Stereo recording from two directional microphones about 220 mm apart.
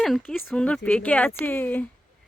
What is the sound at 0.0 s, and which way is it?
Speech, centre (ahead or behind).